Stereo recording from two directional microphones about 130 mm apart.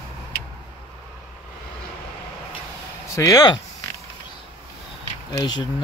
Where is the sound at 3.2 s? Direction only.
25° left (ahead or behind).